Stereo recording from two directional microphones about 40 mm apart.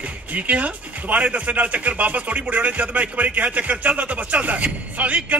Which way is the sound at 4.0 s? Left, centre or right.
Right.